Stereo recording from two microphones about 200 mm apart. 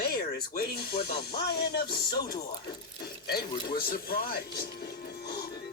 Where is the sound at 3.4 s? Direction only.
20° left (ahead or behind).